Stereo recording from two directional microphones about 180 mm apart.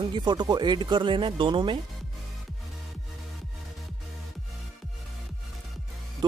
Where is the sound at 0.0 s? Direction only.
25° right (ahead or behind).